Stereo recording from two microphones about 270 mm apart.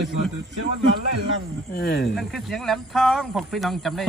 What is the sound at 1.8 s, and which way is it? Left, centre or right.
Speech, left.